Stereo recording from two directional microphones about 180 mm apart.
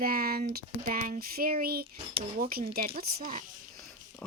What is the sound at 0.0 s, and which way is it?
A woman's voice, 55° right (ahead or behind).